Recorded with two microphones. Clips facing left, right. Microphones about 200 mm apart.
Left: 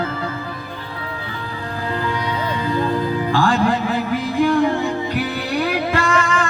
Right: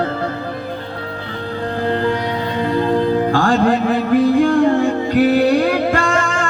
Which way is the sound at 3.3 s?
50° right (ahead or behind).